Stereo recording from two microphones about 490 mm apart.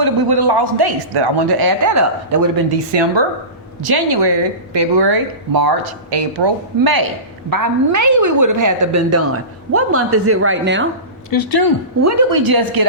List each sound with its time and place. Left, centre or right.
0.0 s speech: right
2.6 s a woman's voice: right
11.3 s speech: left
12.0 s speech: right